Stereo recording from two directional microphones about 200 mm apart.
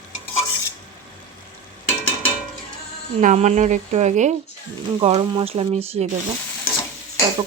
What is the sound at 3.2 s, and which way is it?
Speech, 40° right (ahead or behind).